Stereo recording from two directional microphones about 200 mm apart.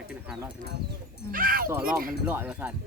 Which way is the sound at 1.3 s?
45° right (ahead or behind).